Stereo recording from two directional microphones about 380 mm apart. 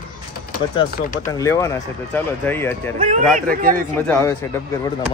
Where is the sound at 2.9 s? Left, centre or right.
Centre.